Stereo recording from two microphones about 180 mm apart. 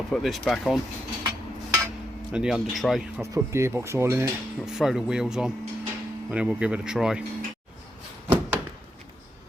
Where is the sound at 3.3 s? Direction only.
15° right (ahead or behind).